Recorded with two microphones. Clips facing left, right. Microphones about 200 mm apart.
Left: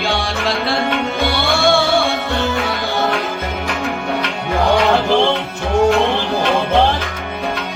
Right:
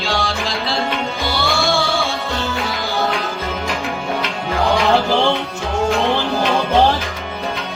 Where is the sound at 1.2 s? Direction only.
65° left (ahead or behind).